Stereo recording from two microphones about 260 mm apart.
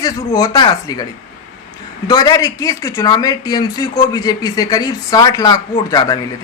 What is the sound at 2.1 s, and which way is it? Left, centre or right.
Speech, centre.